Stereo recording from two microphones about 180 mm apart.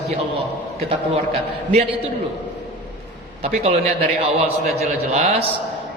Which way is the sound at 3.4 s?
35° right (ahead or behind).